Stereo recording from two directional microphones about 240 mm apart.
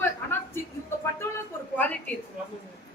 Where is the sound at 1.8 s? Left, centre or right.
Centre.